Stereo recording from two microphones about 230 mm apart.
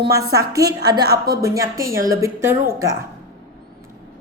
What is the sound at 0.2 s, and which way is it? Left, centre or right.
Speech, centre.